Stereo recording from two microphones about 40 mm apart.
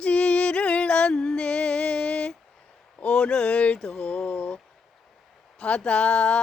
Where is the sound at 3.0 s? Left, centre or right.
Left.